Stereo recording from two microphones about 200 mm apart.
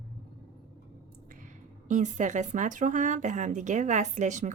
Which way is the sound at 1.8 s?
40° right (ahead or behind).